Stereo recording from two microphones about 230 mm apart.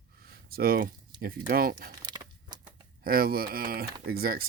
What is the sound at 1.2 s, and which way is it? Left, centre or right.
Speech, right.